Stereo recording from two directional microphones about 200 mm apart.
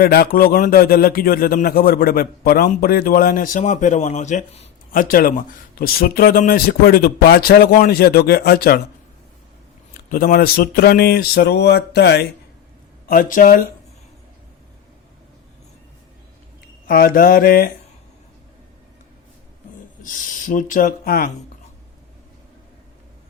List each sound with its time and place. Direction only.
0.0 s a man's voice: 50° left (ahead or behind)
4.9 s a man's voice: 45° left (ahead or behind)
10.1 s a man's voice: 45° left (ahead or behind)
13.1 s a man's voice: 45° left (ahead or behind)
16.8 s a man's voice: 45° left (ahead or behind)
20.0 s a man's voice: 40° left (ahead or behind)